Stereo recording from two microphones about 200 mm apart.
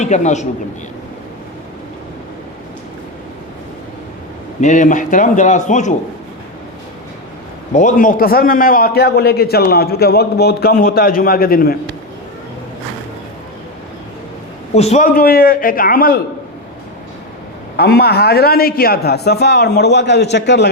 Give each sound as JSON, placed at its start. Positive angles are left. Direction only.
{"t": 0.0, "sound": "a man's voice", "side_deg": 35}
{"t": 4.6, "sound": "a man's voice", "side_deg": 40}
{"t": 7.7, "sound": "a man's voice", "side_deg": 40}
{"t": 14.8, "sound": "a man's voice", "side_deg": 35}
{"t": 17.7, "sound": "a man's voice", "side_deg": 50}